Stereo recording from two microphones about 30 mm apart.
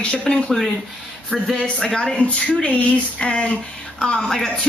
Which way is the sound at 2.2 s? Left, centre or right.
Left.